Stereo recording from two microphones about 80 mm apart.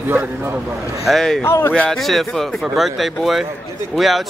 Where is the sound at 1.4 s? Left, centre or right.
Left.